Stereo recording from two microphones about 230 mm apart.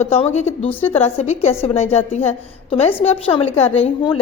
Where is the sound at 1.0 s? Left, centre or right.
Left.